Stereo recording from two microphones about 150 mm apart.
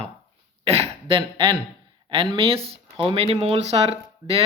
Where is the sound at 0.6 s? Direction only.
40° right (ahead or behind).